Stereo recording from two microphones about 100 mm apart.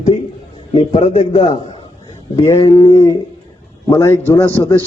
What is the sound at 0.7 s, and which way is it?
Speech, 85° left.